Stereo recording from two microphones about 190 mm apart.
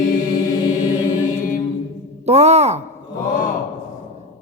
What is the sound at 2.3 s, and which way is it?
Speech, 35° right (ahead or behind).